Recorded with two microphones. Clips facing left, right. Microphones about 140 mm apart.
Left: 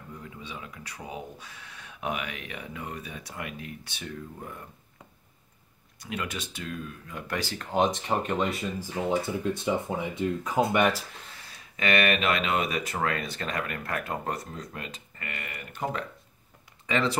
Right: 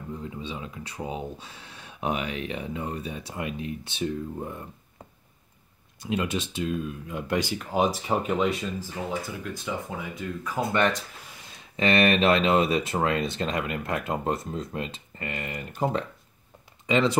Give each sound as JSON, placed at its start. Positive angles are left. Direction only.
{"t": 0.2, "sound": "speech", "side_deg": -25}
{"t": 5.9, "sound": "speech", "side_deg": -25}
{"t": 7.5, "sound": "speech", "side_deg": -5}
{"t": 9.1, "sound": "speech", "side_deg": 25}
{"t": 11.7, "sound": "speech", "side_deg": -30}